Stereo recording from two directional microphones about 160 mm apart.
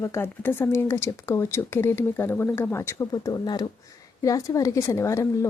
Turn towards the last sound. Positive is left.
turn(degrees=20)  # may be behind; listen again after turning